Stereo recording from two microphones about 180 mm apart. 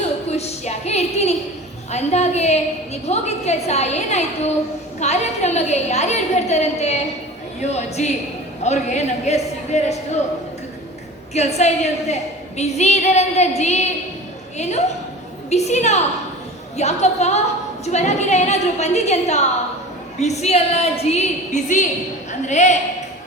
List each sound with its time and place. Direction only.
0.3 s a sound: 35° left (ahead or behind)
1.9 s a woman's voice: 40° left (ahead or behind)
11.3 s a woman's voice: 40° left (ahead or behind)